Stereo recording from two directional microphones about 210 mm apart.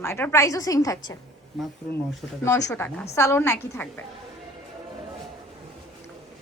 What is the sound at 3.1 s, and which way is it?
Speech, 10° left (ahead or behind).